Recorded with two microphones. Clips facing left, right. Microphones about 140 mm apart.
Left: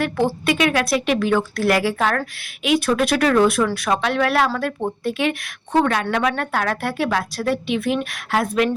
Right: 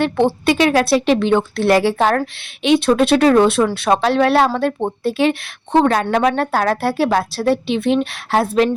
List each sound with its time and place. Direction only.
0.0 s a woman's voice: 25° right (ahead or behind)